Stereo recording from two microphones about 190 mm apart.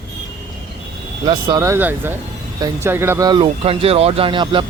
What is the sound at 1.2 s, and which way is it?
Speech, 20° right (ahead or behind).